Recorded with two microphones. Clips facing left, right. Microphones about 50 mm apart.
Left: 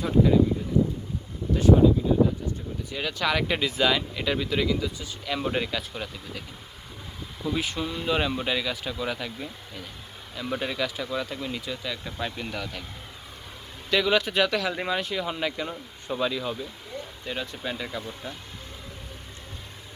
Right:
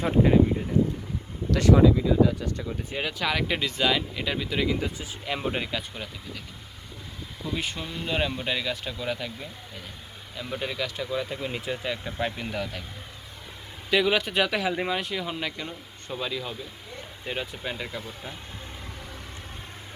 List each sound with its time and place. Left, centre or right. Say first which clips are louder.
0.0 s speech: even; right
1.5 s speech: left 1 dB; right
2.2 s speech: right 1 dB; right
3.1 s speech: left 2 dB; centre
4.8 s speech: even; right
5.2 s speech: left 1 dB; centre
5.5 s speech: left 2 dB; centre
7.4 s speech: left 3 dB; centre
11.5 s speech: right 2 dB; right
12.0 s speech: right 2 dB; centre
12.5 s speech: right 2 dB; centre
13.9 s speech: even; centre